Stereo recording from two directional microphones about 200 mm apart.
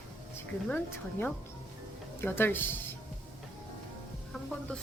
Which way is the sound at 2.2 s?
10° left (ahead or behind).